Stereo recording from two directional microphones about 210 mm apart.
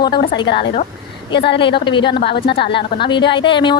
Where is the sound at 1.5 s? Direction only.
25° left (ahead or behind).